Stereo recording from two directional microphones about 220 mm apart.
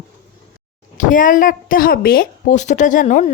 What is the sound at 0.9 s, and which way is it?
Speech, 35° left (ahead or behind).